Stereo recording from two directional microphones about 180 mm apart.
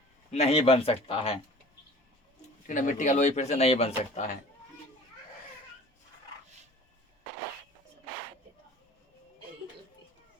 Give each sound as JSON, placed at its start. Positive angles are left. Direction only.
{"t": 0.3, "sound": "speech", "side_deg": 35}
{"t": 2.6, "sound": "speech", "side_deg": 45}